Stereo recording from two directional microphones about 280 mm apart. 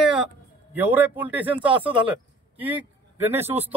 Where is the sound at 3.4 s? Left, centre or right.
Right.